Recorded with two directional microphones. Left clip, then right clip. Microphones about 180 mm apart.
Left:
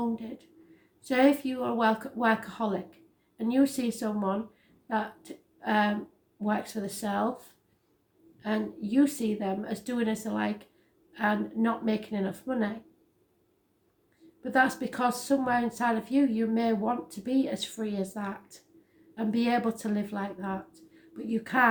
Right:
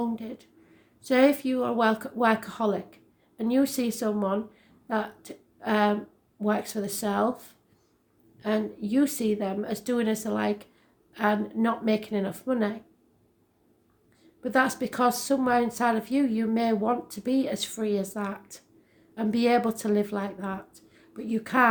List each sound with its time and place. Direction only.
0.2 s a woman's voice: 40° right (ahead or behind)
14.4 s a woman's voice: 40° right (ahead or behind)